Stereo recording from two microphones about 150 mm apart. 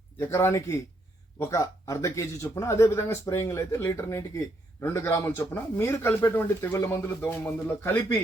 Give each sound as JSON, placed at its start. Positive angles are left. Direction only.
{"t": 0.2, "sound": "speech", "side_deg": 15}